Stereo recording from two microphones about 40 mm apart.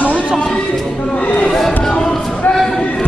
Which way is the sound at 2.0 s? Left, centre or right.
Centre.